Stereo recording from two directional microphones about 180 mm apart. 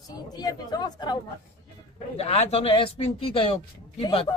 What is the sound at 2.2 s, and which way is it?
Speech, 35° left (ahead or behind).